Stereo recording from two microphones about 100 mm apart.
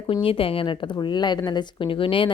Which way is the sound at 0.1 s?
65° left (ahead or behind).